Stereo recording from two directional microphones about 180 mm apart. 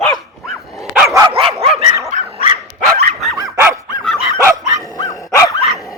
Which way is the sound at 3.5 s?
15° right (ahead or behind).